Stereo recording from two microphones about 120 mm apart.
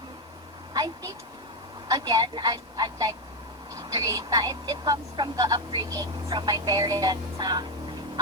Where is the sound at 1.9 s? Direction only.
35° right (ahead or behind).